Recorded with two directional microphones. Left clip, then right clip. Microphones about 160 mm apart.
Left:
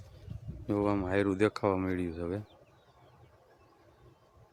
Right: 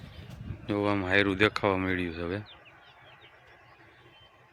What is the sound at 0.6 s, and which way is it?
Speech, 5° left (ahead or behind).